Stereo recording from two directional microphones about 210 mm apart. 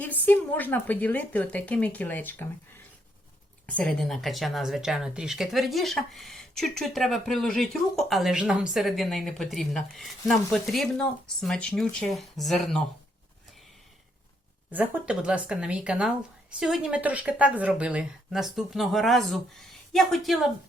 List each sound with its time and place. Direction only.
0.0 s a woman's voice: 10° left (ahead or behind)
3.7 s speech: 5° left (ahead or behind)
14.7 s speech: 10° right (ahead or behind)